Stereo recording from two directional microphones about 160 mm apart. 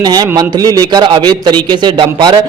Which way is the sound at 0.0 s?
25° right (ahead or behind).